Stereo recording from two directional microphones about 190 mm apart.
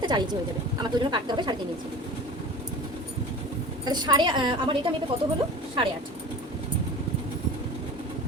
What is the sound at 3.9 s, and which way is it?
Speech, 20° right (ahead or behind).